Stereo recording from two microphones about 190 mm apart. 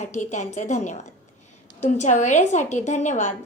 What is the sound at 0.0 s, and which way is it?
A woman's voice, 40° left (ahead or behind).